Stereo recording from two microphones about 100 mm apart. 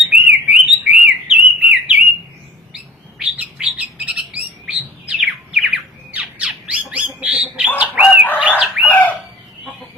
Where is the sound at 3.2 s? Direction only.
15° right (ahead or behind).